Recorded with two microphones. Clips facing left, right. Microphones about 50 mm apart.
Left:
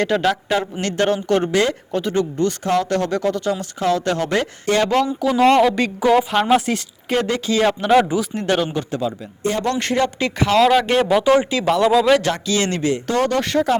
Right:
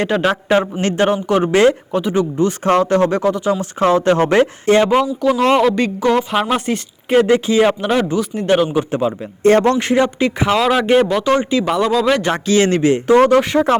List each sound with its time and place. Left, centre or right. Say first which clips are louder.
0.0 s speech: right 2 dB; right
1.5 s speech: right 10 dB; right
1.9 s speech: right 3 dB; centre
2.6 s speech: right 7 dB; right; by 3.7 s centre
3.8 s speech: right 7 dB; right
5.4 s speech: left 1 dB; centre
7.1 s speech: right 7 dB; centre
7.9 s speech: left 2 dB; centre
8.2 s speech: right 5 dB; centre
8.9 s speech: right 5 dB; right
9.7 s speech: right 4 dB; centre
11.1 s speech: even; centre
12.3 s speech: right 6 dB; right